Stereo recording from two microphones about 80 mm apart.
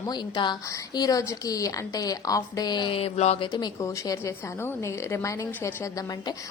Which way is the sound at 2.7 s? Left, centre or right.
Left.